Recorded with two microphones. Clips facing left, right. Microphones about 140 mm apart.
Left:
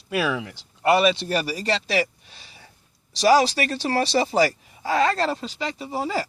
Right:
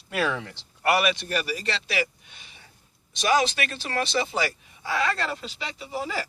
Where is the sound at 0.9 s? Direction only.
25° left (ahead or behind).